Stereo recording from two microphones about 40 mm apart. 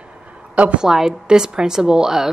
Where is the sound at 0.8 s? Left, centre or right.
Centre.